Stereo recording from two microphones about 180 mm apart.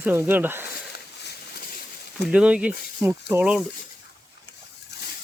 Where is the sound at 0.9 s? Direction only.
65° left (ahead or behind).